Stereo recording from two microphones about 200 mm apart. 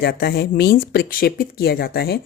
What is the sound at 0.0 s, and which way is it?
Speech, 50° left (ahead or behind).